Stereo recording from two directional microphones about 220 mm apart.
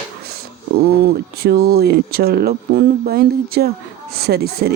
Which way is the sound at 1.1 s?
45° right (ahead or behind).